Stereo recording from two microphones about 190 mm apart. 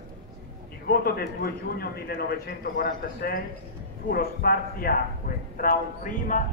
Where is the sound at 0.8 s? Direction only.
55° left (ahead or behind).